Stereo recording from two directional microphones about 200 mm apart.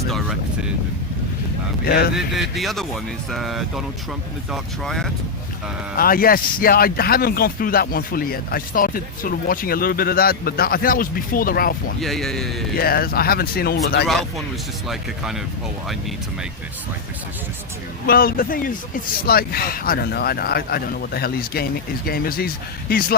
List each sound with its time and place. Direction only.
2.1 s speech: centre (ahead or behind)
6.0 s speech: 45° left (ahead or behind)
11.9 s speech: centre (ahead or behind)
12.7 s speech: 50° left (ahead or behind)
14.1 s speech: centre (ahead or behind)
18.0 s speech: 50° left (ahead or behind)